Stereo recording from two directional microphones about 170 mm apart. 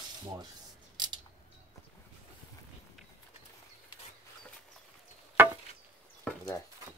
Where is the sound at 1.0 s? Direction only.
25° right (ahead or behind).